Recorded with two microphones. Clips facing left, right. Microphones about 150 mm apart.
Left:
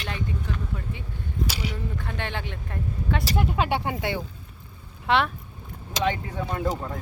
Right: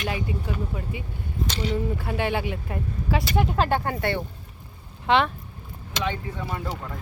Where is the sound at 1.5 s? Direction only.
10° left (ahead or behind).